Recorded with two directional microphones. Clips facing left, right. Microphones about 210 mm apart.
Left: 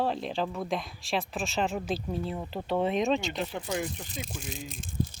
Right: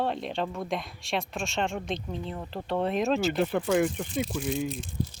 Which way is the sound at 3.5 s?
55° right (ahead or behind).